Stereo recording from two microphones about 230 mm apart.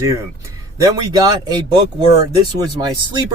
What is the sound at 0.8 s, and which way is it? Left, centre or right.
Speech, centre.